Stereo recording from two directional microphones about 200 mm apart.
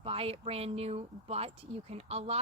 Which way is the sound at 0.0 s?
30° right (ahead or behind).